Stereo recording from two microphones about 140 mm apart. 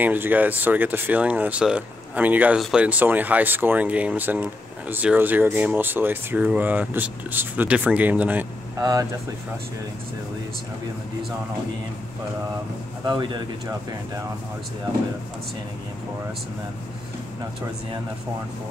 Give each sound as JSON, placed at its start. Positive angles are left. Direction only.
{"t": 0.0, "sound": "speech", "side_deg": -15}
{"t": 13.0, "sound": "a man's voice", "side_deg": -30}